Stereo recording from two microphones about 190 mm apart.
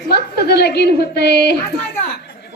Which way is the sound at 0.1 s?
55° left (ahead or behind).